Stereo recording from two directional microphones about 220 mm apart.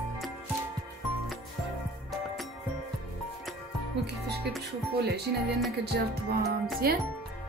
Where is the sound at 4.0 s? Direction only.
50° right (ahead or behind).